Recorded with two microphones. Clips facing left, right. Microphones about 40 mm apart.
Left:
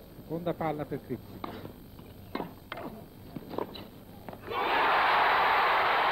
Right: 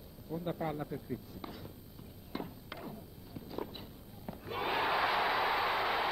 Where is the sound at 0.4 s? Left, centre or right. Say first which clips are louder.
Left 5 dB; left.